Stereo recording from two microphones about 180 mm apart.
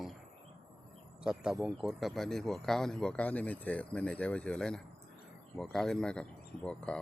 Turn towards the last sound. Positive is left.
turn(degrees=5)  # may be behind; listen again after turning